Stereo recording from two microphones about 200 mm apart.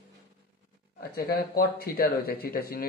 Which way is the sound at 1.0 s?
50° left (ahead or behind).